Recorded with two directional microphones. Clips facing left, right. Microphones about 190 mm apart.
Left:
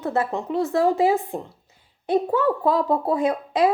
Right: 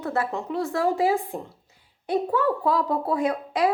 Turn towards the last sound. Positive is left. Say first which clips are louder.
# left 3 dB
turn(degrees=25)  # may be behind; listen again after turning